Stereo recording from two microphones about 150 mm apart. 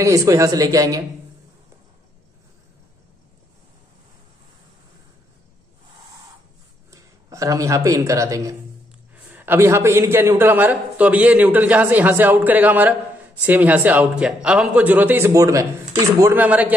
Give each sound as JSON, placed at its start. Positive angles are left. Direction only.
{"t": 0.0, "sound": "speech", "side_deg": -20}
{"t": 6.9, "sound": "a man's voice", "side_deg": -20}